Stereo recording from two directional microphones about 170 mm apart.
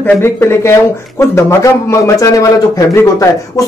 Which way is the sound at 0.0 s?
15° left (ahead or behind).